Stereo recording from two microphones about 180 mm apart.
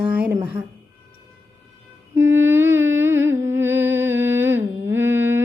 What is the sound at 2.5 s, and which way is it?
Speech, 15° right (ahead or behind).